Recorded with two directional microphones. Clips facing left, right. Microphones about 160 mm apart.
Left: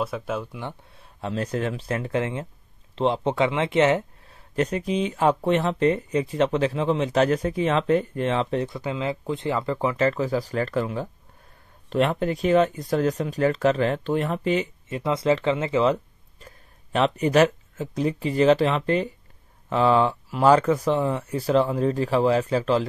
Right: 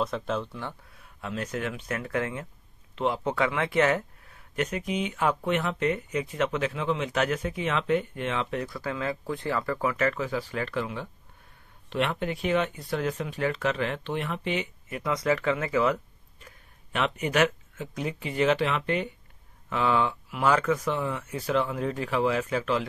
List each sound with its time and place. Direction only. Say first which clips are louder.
0.0 s speech: left 1 dB; 5° left (ahead or behind)
0.9 s speech: left 7 dB; 30° left (ahead or behind)
14.9 s speech: left 4 dB; 25° left (ahead or behind)